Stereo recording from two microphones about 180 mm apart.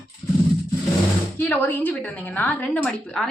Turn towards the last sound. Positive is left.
turn(degrees=5)  # may be behind; listen again after turning